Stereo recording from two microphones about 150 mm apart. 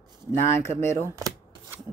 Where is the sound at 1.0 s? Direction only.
20° right (ahead or behind).